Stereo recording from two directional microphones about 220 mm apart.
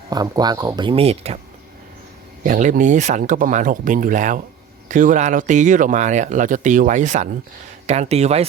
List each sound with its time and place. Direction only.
0.1 s speech: 20° right (ahead or behind)
2.4 s speech: 35° right (ahead or behind)